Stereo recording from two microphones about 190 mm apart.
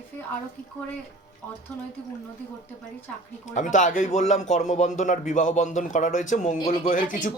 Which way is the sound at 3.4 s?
40° left (ahead or behind).